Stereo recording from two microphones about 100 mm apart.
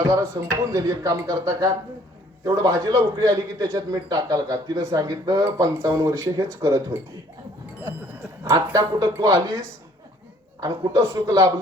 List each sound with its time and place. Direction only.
0.0 s a man's voice: 30° right (ahead or behind)
8.7 s a man's voice: 35° right (ahead or behind)